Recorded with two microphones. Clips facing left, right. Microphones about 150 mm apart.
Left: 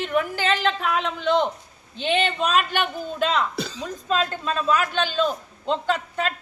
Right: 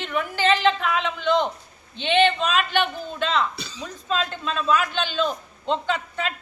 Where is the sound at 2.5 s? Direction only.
45° left (ahead or behind).